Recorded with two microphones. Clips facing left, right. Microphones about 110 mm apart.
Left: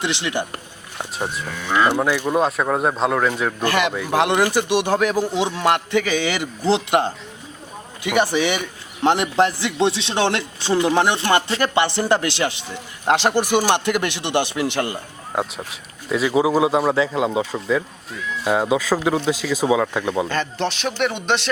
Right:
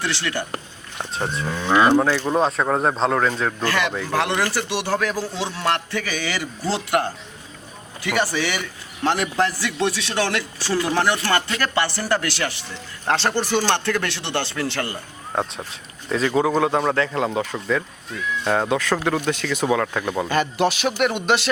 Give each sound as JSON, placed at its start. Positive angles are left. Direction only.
{"t": 0.0, "sound": "a man's voice", "side_deg": 20}
{"t": 1.5, "sound": "moo", "side_deg": -20}
{"t": 2.0, "sound": "a man's voice", "side_deg": 10}
{"t": 20.2, "sound": "speech", "side_deg": -10}